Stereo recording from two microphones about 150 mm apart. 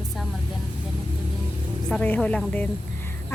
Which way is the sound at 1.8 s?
10° left (ahead or behind).